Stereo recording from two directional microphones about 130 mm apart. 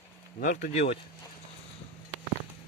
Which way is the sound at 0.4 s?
90° left.